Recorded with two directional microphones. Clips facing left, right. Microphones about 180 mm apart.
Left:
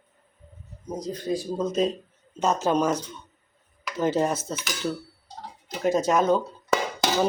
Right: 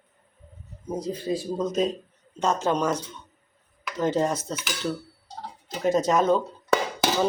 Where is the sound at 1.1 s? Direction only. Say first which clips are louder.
Left 2 dB; 5° right (ahead or behind).